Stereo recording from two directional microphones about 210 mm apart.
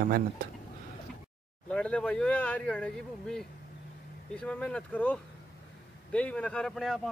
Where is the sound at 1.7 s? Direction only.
5° left (ahead or behind).